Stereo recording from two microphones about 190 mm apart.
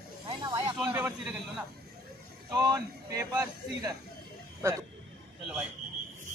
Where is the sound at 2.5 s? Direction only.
20° right (ahead or behind).